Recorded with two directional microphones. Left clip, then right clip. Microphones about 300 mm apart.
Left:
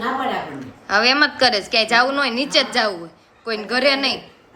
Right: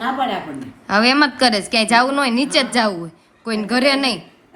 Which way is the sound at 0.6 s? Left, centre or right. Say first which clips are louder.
Right 1 dB; centre.